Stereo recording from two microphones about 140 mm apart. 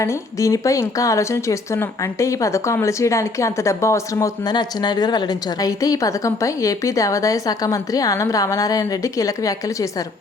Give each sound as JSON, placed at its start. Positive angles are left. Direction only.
{"t": 0.0, "sound": "a woman's voice", "side_deg": 20}